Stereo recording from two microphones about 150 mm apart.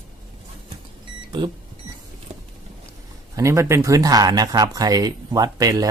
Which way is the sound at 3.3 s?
20° right (ahead or behind).